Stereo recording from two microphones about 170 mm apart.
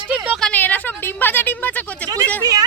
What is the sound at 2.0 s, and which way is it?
Speech, 20° right (ahead or behind).